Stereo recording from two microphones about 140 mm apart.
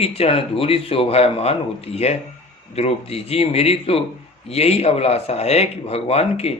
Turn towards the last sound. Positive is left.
turn(degrees=45)  # may be behind; listen again after turning